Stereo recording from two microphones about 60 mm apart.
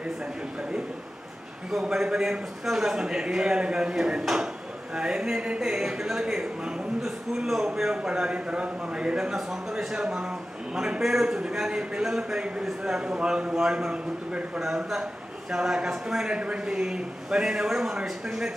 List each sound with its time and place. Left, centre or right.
1.7 s a man's voice: centre
16.3 s a man's voice: centre